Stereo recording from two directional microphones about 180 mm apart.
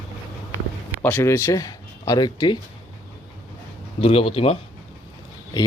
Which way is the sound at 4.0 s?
35° left (ahead or behind).